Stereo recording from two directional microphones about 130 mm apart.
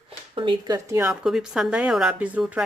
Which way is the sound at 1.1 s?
5° right (ahead or behind).